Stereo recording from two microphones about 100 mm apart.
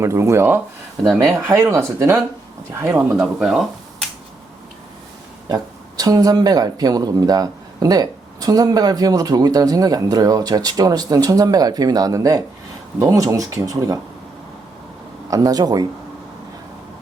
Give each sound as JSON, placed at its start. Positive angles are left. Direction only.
{"t": 0.0, "sound": "speech", "side_deg": -30}
{"t": 2.9, "sound": "speech", "side_deg": -15}
{"t": 3.4, "sound": "a sound", "side_deg": 0}
{"t": 6.0, "sound": "speech", "side_deg": -40}
{"t": 15.3, "sound": "speech", "side_deg": -40}